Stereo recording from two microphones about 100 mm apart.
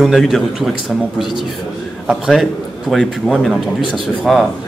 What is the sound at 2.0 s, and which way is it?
A man's voice, 5° right (ahead or behind).